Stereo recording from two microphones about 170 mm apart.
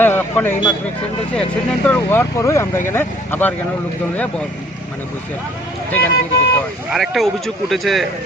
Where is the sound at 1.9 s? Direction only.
10° left (ahead or behind).